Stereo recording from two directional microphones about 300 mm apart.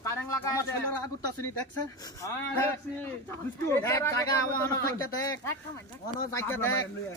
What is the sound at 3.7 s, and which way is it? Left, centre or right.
Speech, centre.